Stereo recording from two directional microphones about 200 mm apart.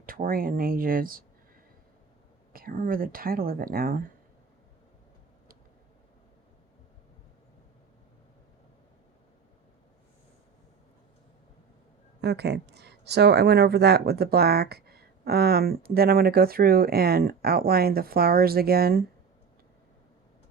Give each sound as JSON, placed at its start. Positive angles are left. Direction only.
{"t": 0.0, "sound": "speech", "side_deg": -45}
{"t": 2.5, "sound": "speech", "side_deg": -45}
{"t": 12.2, "sound": "speech", "side_deg": -55}